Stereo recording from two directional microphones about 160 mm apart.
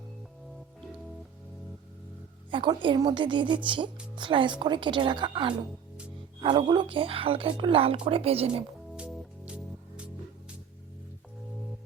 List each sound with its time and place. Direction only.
2.5 s a woman's voice: 30° right (ahead or behind)
9.0 s music: 5° right (ahead or behind)